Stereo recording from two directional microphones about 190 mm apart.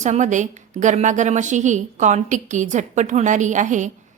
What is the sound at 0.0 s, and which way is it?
A woman's voice, 40° right (ahead or behind).